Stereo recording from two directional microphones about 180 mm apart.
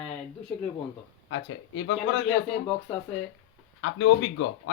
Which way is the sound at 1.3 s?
90° left.